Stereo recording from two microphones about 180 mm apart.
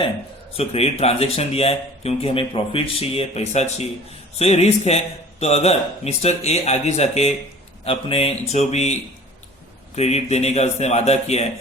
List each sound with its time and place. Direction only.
0.5 s speech: 35° left (ahead or behind)